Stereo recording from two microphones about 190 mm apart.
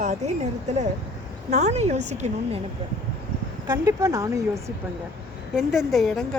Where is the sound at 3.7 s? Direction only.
15° right (ahead or behind).